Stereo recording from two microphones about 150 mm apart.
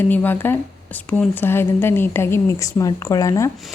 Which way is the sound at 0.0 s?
10° left (ahead or behind).